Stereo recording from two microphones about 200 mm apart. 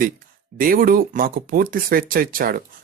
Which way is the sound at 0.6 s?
45° right (ahead or behind).